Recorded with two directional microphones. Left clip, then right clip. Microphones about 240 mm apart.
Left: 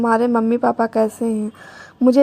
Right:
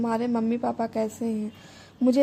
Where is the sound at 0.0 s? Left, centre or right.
Left.